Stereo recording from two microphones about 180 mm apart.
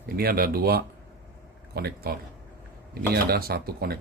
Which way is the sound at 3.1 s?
60° right (ahead or behind).